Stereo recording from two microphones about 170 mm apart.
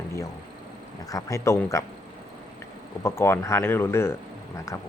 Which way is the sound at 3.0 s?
15° left (ahead or behind).